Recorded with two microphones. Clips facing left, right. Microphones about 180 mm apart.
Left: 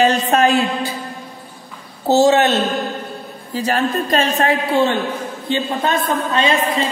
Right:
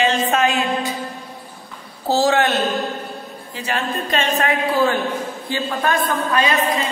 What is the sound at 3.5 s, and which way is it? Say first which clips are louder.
A woman's voice: left 6 dB; 40° left (ahead or behind).